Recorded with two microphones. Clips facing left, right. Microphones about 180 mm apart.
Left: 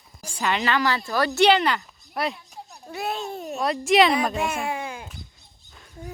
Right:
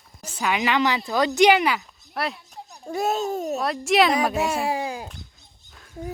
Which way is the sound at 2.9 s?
45° right (ahead or behind).